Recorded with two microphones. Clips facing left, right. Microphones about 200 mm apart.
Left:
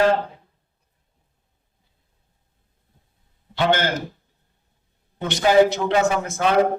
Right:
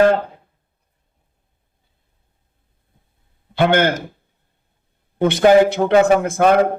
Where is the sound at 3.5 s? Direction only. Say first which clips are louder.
Right 5 dB; 55° right (ahead or behind).